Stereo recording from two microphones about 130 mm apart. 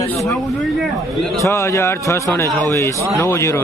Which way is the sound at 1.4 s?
20° left (ahead or behind).